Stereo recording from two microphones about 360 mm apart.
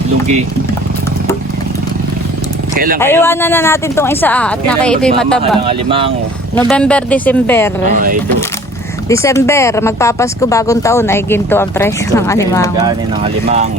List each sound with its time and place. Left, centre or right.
2.7 s speech: right
3.0 s speech: centre
5.6 s speech: centre
6.6 s speech: centre
9.0 s speech: centre
12.8 s speech: centre